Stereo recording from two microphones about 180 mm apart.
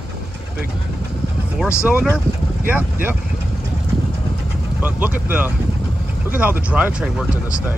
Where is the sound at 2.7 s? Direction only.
10° right (ahead or behind).